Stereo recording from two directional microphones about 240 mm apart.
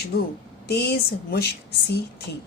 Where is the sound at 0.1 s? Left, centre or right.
Left.